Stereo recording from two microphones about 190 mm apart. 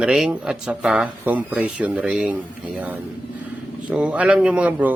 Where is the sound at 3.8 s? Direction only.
5° right (ahead or behind).